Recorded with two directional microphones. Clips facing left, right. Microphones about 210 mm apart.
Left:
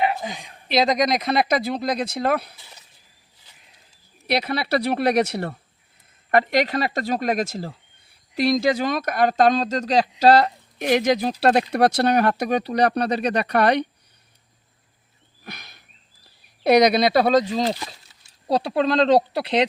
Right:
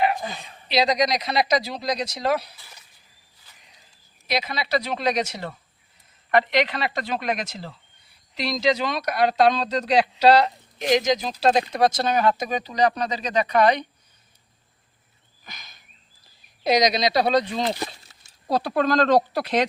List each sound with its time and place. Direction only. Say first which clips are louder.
0.2 s a woman's voice: left 1 dB; 15° left (ahead or behind)
0.7 s speech: left 2 dB; 50° left (ahead or behind)
4.3 s speech: left 3 dB; 60° left (ahead or behind)
6.3 s speech: left 2 dB; 45° left (ahead or behind); by 13.8 s 65° left (ahead or behind)
15.4 s a sound: left 7 dB; 65° left (ahead or behind)
16.6 s speech: left 5 dB; 60° left (ahead or behind); by 19.1 s 25° left (ahead or behind)